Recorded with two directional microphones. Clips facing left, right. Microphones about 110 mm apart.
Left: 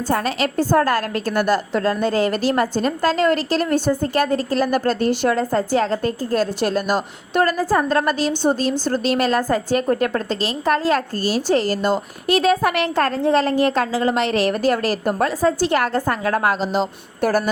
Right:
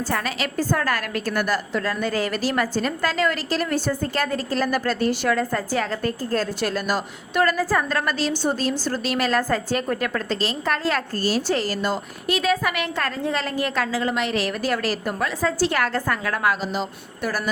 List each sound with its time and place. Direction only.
0.1 s a woman's voice: 30° left (ahead or behind)
12.3 s a woman's voice: 35° left (ahead or behind)
15.6 s a woman's voice: 20° left (ahead or behind)
16.2 s a woman's voice: 30° left (ahead or behind)